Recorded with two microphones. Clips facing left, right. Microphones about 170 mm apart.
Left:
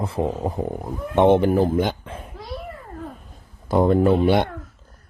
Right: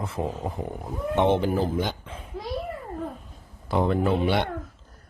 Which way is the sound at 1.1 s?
55° left (ahead or behind).